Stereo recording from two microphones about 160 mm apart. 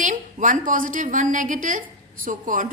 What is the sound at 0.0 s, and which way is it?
A woman's voice, 55° right (ahead or behind).